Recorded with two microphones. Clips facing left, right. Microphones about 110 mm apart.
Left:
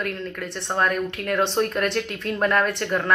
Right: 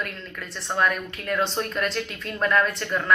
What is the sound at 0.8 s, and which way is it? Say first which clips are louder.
Speech: left 1 dB; 40° left (ahead or behind).